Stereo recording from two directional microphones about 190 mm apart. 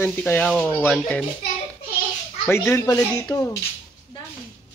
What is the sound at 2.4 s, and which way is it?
Speech, 15° left (ahead or behind).